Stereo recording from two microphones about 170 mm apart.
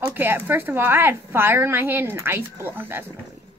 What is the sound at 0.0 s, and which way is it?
A woman's voice, 10° right (ahead or behind).